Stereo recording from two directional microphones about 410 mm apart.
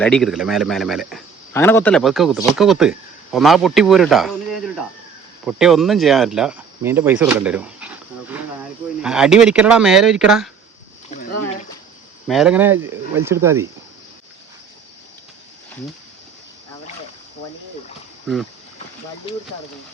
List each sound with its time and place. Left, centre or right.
0.0 s speech: centre
11.1 s a sound: left
12.3 s speech: centre
18.3 s speech: centre